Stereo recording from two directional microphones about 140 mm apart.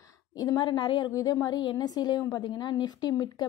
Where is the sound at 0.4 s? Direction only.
30° left (ahead or behind).